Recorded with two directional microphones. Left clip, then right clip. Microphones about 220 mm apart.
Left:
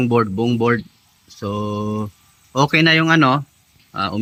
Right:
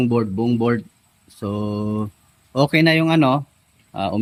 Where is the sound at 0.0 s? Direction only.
Centre (ahead or behind).